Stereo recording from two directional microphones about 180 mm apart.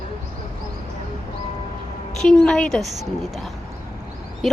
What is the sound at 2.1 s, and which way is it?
Speech, 5° left (ahead or behind).